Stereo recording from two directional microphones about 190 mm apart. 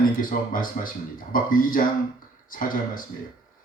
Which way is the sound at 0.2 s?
45° left (ahead or behind).